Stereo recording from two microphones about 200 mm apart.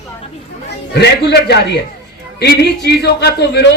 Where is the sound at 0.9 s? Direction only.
55° left (ahead or behind).